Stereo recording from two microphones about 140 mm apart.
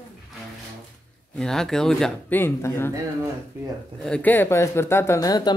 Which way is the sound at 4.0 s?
10° left (ahead or behind).